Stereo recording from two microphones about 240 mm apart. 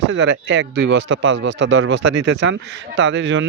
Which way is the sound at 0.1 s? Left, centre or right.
Right.